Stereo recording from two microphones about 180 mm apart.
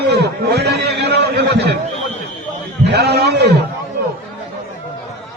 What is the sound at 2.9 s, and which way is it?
Speech, 65° right (ahead or behind).